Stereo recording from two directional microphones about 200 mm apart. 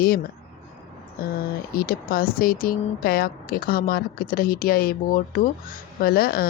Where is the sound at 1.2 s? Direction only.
50° left (ahead or behind).